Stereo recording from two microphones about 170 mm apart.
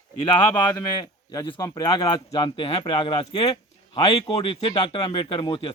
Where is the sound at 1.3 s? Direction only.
20° left (ahead or behind).